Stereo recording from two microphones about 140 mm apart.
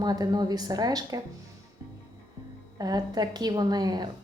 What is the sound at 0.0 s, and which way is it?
A woman's voice, 30° right (ahead or behind).